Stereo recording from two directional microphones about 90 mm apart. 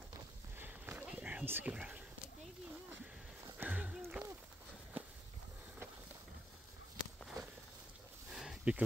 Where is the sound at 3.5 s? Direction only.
15° right (ahead or behind).